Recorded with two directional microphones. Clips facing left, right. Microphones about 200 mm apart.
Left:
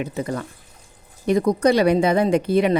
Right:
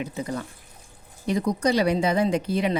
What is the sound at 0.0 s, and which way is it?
Speech, 60° left (ahead or behind).